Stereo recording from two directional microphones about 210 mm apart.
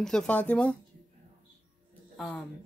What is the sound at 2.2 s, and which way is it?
Speech, centre (ahead or behind).